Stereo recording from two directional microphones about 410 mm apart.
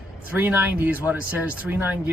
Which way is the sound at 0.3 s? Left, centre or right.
Centre.